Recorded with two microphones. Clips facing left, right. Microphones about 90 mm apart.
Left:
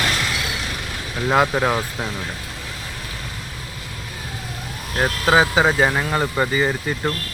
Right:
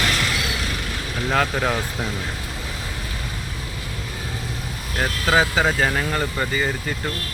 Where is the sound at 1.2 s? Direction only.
15° left (ahead or behind).